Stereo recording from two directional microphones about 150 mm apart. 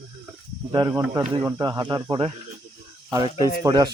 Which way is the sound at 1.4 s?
25° right (ahead or behind).